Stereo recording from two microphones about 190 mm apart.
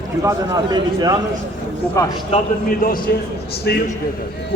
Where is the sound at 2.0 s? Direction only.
15° left (ahead or behind).